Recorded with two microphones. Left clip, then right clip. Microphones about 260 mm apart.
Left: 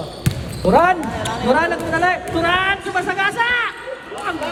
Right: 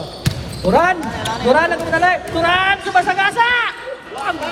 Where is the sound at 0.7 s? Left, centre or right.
Centre.